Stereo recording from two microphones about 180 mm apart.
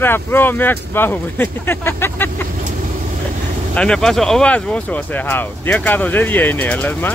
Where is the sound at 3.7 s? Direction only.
5° left (ahead or behind).